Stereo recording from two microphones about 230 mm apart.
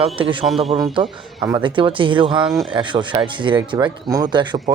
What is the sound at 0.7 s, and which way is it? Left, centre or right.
Speech, centre.